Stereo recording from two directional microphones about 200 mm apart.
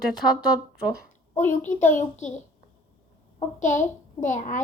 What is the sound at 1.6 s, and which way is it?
Speech, 10° left (ahead or behind).